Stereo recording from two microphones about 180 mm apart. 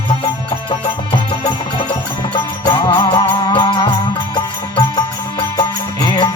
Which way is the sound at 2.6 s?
25° left (ahead or behind).